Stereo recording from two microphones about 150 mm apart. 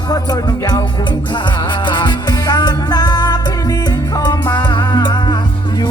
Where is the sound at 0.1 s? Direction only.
25° left (ahead or behind).